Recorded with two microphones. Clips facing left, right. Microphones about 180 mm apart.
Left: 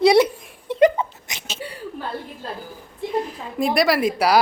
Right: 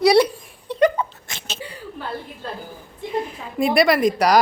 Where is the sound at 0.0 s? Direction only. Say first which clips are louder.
Even; 20° left (ahead or behind).